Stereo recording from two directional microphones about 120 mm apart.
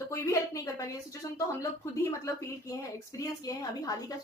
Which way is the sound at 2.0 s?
25° left (ahead or behind).